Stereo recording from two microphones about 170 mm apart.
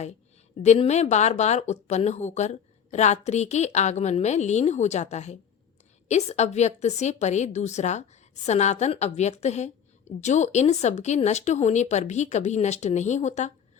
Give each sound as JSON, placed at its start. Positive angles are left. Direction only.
{"t": 0.6, "sound": "speech", "side_deg": 40}